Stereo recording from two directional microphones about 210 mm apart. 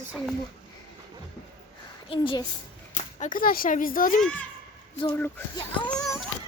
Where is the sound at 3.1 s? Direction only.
35° left (ahead or behind).